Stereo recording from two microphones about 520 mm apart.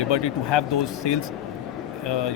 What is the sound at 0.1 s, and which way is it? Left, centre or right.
Speech, left.